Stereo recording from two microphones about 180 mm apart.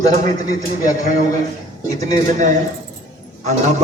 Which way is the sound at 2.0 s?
40° right (ahead or behind).